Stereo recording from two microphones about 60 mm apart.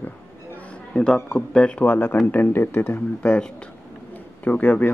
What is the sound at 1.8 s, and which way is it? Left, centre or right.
Speech, left.